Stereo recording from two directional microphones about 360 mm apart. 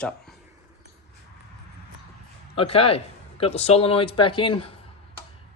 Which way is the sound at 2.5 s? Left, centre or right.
Centre.